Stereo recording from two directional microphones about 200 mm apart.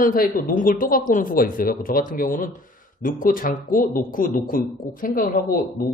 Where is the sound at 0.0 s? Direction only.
45° left (ahead or behind).